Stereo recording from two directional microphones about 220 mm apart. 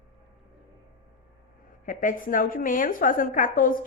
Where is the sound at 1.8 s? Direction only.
35° left (ahead or behind).